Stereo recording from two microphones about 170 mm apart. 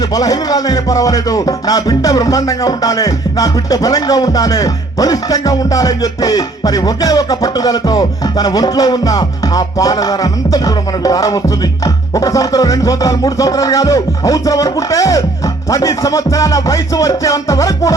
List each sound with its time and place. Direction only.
0.1 s music: 20° left (ahead or behind)